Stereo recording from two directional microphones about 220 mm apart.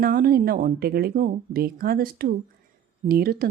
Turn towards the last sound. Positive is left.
turn(degrees=-40)  # may be behind; listen again after turning